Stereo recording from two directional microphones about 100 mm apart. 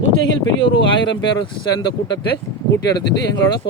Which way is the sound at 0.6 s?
55° left (ahead or behind).